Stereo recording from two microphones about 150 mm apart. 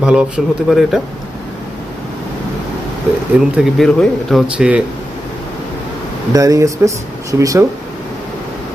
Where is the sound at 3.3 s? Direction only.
5° right (ahead or behind).